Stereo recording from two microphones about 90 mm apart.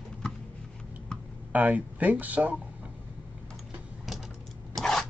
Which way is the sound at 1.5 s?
15° right (ahead or behind).